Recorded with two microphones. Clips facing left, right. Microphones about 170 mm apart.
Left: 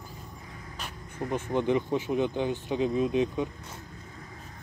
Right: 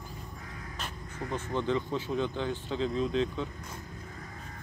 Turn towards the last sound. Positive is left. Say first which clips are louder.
# left 3 dB
turn(degrees=15)  # may be behind; listen again after turning